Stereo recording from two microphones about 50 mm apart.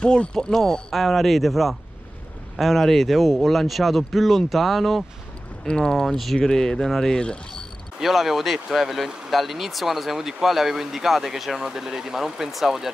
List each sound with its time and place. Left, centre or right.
0.0 s speech: centre
5.7 s speech: centre
8.0 s speech: centre